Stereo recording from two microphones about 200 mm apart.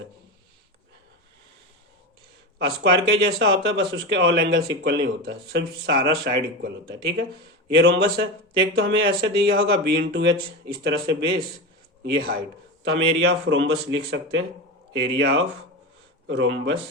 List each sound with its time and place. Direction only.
2.6 s speech: 55° right (ahead or behind)
12.8 s speech: 60° right (ahead or behind)